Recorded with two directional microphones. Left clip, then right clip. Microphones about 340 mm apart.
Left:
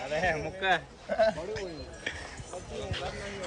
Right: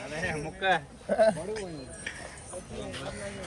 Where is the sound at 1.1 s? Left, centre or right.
Centre.